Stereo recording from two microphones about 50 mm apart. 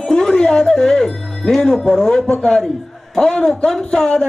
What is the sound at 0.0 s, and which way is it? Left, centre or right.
Music, centre.